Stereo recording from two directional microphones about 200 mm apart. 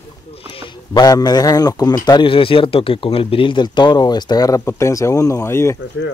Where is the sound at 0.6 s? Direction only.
20° left (ahead or behind).